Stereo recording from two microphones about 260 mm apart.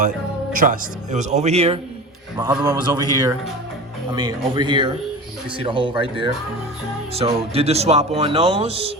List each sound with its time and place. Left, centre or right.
0.5 s speech: right
2.4 s a man's voice: centre